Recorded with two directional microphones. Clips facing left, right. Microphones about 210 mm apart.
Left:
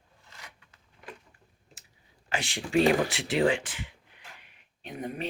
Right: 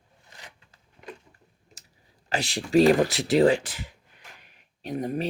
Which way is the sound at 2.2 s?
35° right (ahead or behind).